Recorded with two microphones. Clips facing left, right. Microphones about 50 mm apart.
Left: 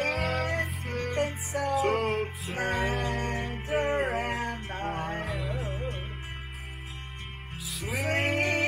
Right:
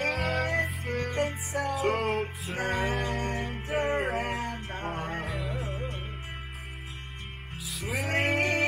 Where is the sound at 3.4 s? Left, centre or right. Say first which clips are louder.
Left 1 dB; right.